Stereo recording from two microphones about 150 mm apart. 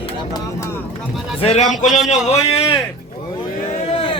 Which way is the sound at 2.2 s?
45° left (ahead or behind).